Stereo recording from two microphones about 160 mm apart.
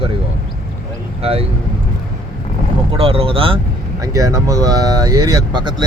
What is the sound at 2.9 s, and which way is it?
Speech, 35° right (ahead or behind).